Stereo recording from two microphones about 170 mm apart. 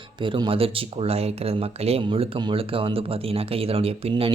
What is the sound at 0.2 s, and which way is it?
Speech, 30° right (ahead or behind).